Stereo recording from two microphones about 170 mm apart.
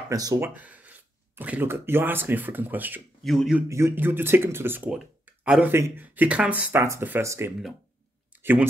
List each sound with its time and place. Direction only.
0.1 s speech: 20° right (ahead or behind)
0.6 s speech: 10° right (ahead or behind)
3.6 s speech: 15° right (ahead or behind)